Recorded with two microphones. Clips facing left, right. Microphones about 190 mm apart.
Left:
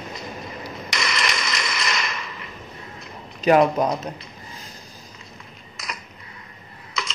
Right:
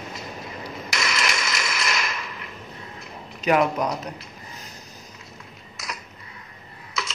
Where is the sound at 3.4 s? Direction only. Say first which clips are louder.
Left 4 dB; 30° left (ahead or behind).